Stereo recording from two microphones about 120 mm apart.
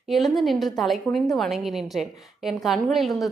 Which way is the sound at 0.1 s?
Centre (ahead or behind).